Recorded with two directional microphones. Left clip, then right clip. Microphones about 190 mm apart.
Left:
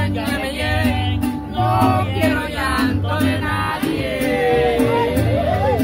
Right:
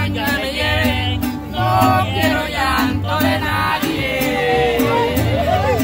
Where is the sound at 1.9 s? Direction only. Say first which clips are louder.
Right 3 dB; 20° right (ahead or behind).